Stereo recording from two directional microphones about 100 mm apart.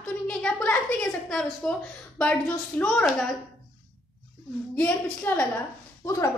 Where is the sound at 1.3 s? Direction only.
5° left (ahead or behind).